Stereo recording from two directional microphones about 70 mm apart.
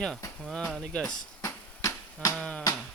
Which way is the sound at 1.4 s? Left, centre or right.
Left.